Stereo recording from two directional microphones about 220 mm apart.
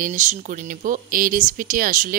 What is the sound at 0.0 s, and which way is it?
Speech, 35° right (ahead or behind).